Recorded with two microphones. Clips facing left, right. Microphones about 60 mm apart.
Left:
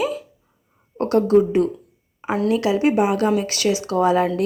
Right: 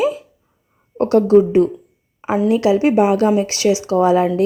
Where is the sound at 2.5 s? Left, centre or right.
Right.